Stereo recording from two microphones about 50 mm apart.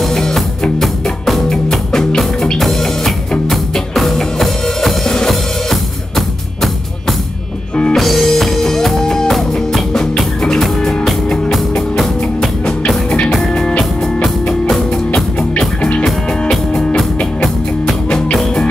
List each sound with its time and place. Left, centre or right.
0.0 s music: centre
3.9 s music: centre
15.8 s music: left